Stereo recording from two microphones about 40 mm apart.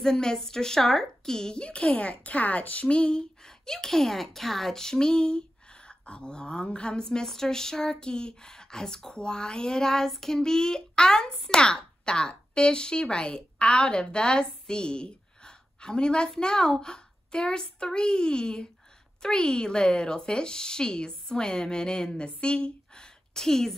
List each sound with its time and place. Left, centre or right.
0.0 s a woman's voice: centre